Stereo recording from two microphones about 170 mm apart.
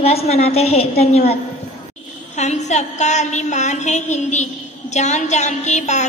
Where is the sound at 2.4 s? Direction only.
45° left (ahead or behind).